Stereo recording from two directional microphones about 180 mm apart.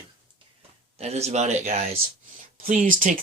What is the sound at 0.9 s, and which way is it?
Speech, 35° right (ahead or behind).